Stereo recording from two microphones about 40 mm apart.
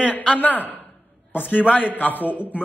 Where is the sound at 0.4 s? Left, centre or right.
Left.